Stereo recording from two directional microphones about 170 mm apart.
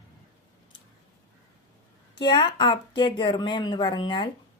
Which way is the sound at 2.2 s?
25° left (ahead or behind).